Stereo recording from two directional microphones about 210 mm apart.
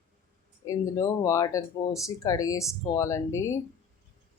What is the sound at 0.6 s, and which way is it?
Speech, 15° left (ahead or behind).